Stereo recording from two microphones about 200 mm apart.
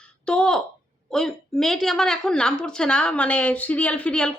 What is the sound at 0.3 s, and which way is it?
A woman's voice, 5° left (ahead or behind).